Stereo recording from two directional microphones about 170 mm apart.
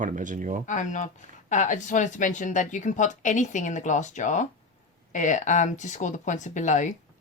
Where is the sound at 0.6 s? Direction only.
45° left (ahead or behind).